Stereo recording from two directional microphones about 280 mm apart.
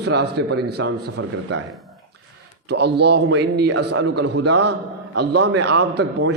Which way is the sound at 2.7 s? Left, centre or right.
Right.